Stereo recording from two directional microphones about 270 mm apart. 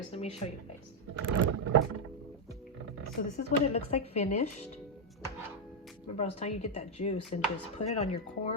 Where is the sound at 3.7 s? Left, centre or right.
Left.